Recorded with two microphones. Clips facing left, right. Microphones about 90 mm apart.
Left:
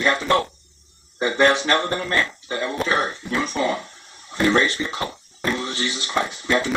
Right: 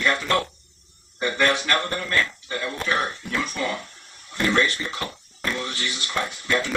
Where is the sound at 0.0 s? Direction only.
25° left (ahead or behind).